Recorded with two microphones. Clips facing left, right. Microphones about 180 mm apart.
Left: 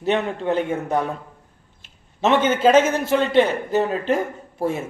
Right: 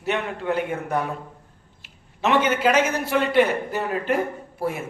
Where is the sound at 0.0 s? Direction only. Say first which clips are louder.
Left 4 dB; 25° left (ahead or behind).